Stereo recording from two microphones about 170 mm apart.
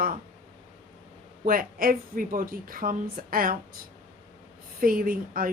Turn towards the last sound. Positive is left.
turn(degrees=-55)  # may be behind; listen again after turning